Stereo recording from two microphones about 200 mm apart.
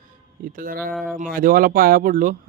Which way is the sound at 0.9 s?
Centre (ahead or behind).